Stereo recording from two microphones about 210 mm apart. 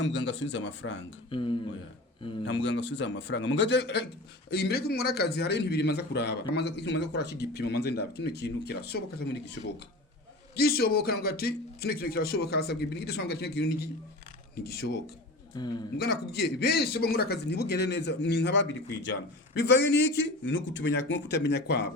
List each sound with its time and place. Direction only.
0.0 s a man's voice: 60° left (ahead or behind)
1.3 s speech: 25° left (ahead or behind)
2.4 s a man's voice: 60° left (ahead or behind)
10.5 s a man's voice: 45° left (ahead or behind)
15.6 s speech: 20° left (ahead or behind)
16.0 s a man's voice: 50° left (ahead or behind)